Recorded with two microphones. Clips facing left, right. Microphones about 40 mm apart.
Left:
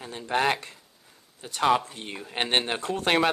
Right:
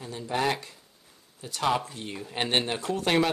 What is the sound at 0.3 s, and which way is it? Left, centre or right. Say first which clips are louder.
Speech: left 3 dB; left.